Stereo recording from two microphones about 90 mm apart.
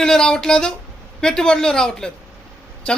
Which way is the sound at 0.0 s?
5° left (ahead or behind).